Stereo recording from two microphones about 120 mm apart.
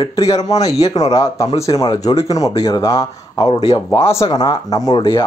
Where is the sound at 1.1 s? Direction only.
25° left (ahead or behind).